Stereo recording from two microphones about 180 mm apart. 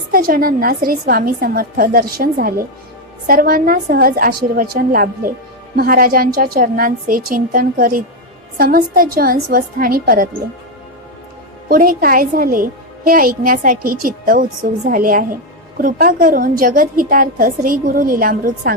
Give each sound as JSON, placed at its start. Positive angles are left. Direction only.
{"t": 0.1, "sound": "a woman's voice", "side_deg": -55}
{"t": 11.7, "sound": "a woman's voice", "side_deg": -50}